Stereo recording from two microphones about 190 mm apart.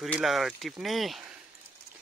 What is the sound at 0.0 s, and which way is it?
Speech, centre (ahead or behind).